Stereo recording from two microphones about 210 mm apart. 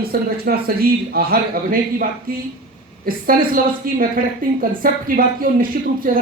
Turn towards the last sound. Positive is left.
turn(degrees=-40)  # may be behind; listen again after turning